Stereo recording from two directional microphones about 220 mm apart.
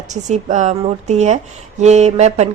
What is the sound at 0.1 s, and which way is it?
A woman's voice, 30° right (ahead or behind).